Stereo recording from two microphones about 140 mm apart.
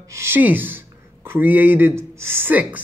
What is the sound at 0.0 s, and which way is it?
Speech, 20° right (ahead or behind).